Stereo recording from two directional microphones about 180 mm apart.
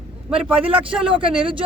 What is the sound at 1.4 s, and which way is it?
Speech, 30° right (ahead or behind).